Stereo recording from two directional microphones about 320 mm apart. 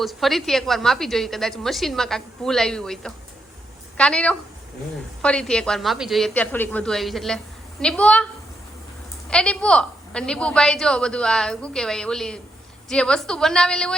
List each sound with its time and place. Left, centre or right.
0.0 s a woman's voice: centre
9.3 s a woman's voice: centre